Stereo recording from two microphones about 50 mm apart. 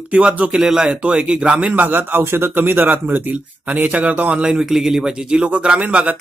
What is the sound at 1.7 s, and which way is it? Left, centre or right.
A man's voice, right.